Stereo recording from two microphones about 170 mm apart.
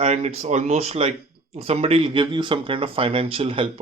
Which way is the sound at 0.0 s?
40° right (ahead or behind).